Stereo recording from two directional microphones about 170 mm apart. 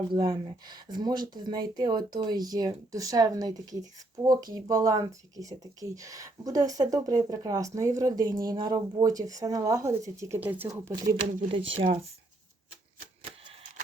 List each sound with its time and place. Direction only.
0.1 s speech: 25° right (ahead or behind); by 10.7 s 10° right (ahead or behind)
10.7 s speech: 20° right (ahead or behind)
11.4 s speech: 30° right (ahead or behind)